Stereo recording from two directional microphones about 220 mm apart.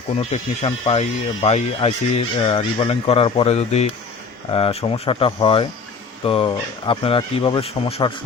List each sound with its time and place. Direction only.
0.2 s speech: 30° left (ahead or behind)